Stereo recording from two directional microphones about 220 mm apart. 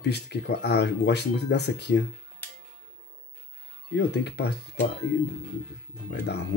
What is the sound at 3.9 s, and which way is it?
Speech, 50° left (ahead or behind).